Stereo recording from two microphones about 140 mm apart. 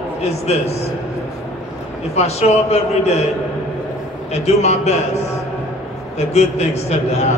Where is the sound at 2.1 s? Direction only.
50° left (ahead or behind).